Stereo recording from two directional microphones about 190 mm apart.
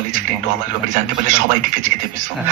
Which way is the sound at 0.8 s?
45° right (ahead or behind).